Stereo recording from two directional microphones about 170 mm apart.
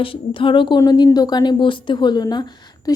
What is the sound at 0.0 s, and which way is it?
Speech, 30° left (ahead or behind).